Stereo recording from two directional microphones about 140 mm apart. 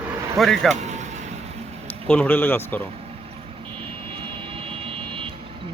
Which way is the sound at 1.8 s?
10° left (ahead or behind).